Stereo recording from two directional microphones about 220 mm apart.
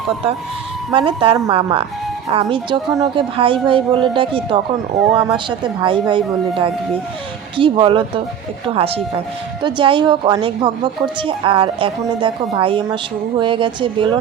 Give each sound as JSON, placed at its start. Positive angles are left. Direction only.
{"t": 0.9, "sound": "speech", "side_deg": -25}
{"t": 4.9, "sound": "speech", "side_deg": 0}
{"t": 5.3, "sound": "speech", "side_deg": -20}
{"t": 7.5, "sound": "speech", "side_deg": -20}